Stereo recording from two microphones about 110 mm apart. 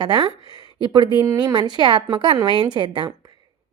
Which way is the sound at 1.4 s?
40° right (ahead or behind).